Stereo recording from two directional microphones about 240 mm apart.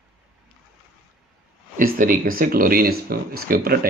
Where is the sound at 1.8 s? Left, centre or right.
Right.